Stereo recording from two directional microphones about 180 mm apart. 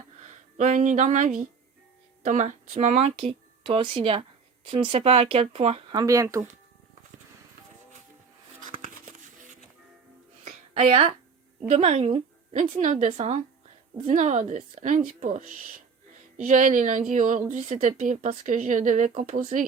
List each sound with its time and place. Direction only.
0.2 s a woman's voice: 40° right (ahead or behind)
5.9 s speech: 20° right (ahead or behind)
8.6 s a sound: 50° right (ahead or behind)
10.4 s music: 35° right (ahead or behind)
11.7 s a woman's voice: 35° right (ahead or behind)